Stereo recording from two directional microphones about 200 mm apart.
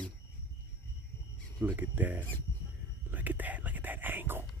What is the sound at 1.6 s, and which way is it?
Speech, 10° right (ahead or behind).